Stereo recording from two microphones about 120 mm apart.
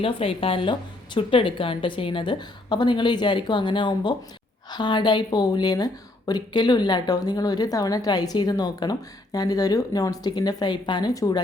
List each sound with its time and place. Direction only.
0.0 s a woman's voice: 50° left (ahead or behind); by 11.3 s 30° left (ahead or behind)